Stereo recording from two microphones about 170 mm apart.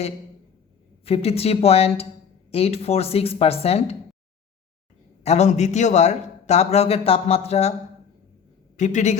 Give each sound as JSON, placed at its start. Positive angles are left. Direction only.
{"t": 1.0, "sound": "a man's voice", "side_deg": 35}
{"t": 5.2, "sound": "a man's voice", "side_deg": 40}
{"t": 8.7, "sound": "a man's voice", "side_deg": 45}